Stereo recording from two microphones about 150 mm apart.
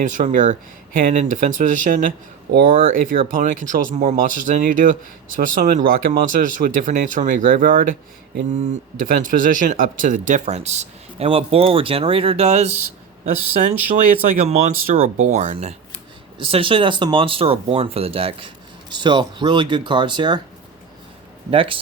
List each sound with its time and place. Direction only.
0.0 s speech: 55° right (ahead or behind)
3.2 s speech: 65° right (ahead or behind)
8.5 s speech: 55° right (ahead or behind)
13.2 s speech: 60° right (ahead or behind)
16.4 s speech: 35° right (ahead or behind)
21.5 s speech: 35° right (ahead or behind)